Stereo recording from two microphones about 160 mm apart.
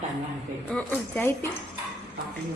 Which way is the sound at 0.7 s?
10° left (ahead or behind).